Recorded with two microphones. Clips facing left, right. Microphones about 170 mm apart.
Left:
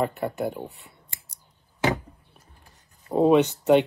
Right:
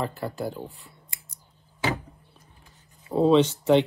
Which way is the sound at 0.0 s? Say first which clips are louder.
Left 4 dB; 20° left (ahead or behind).